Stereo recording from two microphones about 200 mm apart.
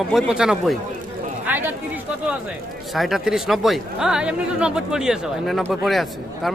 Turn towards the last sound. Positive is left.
turn(degrees=0)  # may be behind; listen again after turning